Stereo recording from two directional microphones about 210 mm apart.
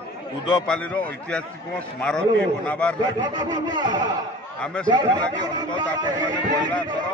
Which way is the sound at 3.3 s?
20° right (ahead or behind).